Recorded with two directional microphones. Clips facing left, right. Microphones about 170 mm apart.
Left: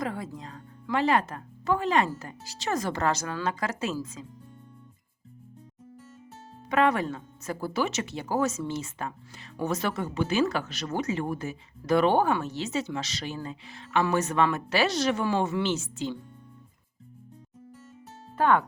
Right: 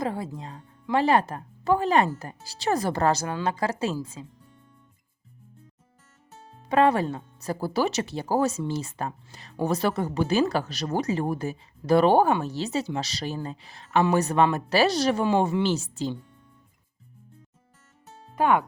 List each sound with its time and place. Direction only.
0.0 s speech: 30° right (ahead or behind)
6.7 s speech: 30° right (ahead or behind)
18.3 s speech: 15° right (ahead or behind)